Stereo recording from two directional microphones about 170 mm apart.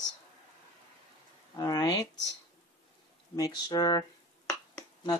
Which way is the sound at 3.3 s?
25° left (ahead or behind).